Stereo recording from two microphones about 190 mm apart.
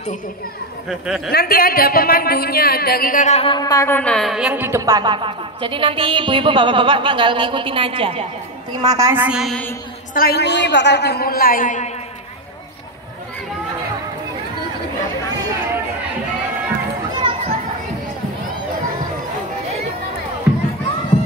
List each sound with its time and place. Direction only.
0.8 s speech: centre (ahead or behind)
1.3 s speech: 50° left (ahead or behind); by 8.3 s 30° right (ahead or behind)
8.8 s speech: 15° right (ahead or behind); by 9.8 s 5° left (ahead or behind)
10.1 s a woman's voice: 55° left (ahead or behind)
17.2 s children playing: 25° right (ahead or behind)